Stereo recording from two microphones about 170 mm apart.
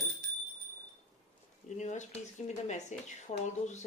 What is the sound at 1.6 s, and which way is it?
Speech, 45° left (ahead or behind).